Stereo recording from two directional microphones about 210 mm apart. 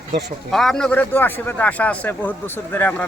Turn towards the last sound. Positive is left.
turn(degrees=10)  # may be behind; listen again after turning